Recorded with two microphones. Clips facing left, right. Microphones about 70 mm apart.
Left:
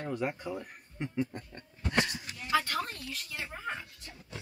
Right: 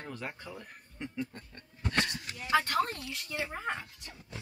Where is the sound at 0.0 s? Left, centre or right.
Centre.